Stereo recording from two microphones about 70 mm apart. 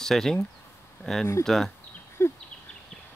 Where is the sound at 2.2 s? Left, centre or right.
Left.